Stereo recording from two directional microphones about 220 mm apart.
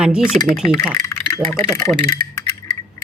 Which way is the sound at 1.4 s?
5° left (ahead or behind).